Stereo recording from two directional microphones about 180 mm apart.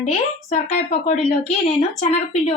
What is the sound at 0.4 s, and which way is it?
Speech, 40° left (ahead or behind).